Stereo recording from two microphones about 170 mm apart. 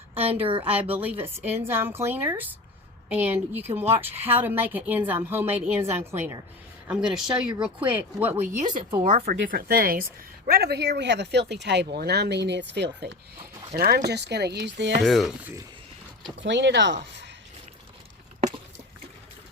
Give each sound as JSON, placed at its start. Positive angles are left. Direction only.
{"t": 0.1, "sound": "a woman's voice", "side_deg": -35}
{"t": 0.7, "sound": "a woman's voice", "side_deg": -10}
{"t": 9.5, "sound": "speech", "side_deg": -60}
{"t": 13.7, "sound": "speech", "side_deg": -65}
{"t": 15.0, "sound": "speech", "side_deg": 0}
{"t": 16.4, "sound": "speech", "side_deg": -90}